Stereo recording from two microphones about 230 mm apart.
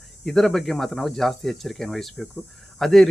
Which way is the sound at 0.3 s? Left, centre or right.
Centre.